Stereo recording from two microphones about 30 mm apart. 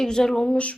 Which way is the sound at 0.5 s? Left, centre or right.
Left.